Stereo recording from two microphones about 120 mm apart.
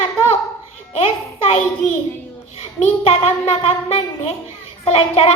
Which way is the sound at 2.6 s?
55° left (ahead or behind).